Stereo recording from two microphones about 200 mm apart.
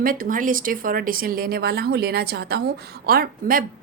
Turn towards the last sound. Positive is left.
turn(degrees=-45)  # may be behind; listen again after turning